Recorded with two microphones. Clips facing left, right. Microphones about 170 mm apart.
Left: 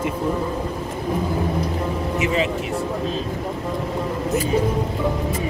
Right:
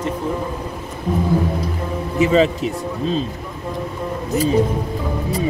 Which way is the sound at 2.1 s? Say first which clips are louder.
Right 8 dB; 35° right (ahead or behind).